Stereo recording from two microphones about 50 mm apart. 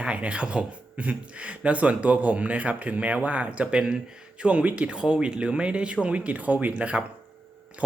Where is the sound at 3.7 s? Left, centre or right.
Centre.